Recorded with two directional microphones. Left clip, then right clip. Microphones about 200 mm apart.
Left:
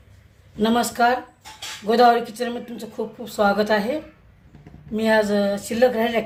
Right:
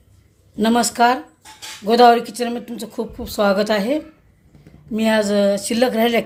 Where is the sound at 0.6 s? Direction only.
40° right (ahead or behind).